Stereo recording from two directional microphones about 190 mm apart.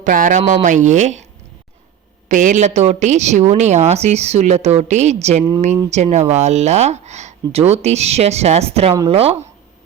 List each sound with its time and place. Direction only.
0.0 s a woman's voice: 45° right (ahead or behind)
2.3 s a woman's voice: 45° right (ahead or behind)